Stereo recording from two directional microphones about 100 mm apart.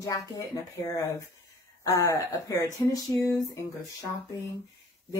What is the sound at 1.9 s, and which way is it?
Speech, 35° left (ahead or behind).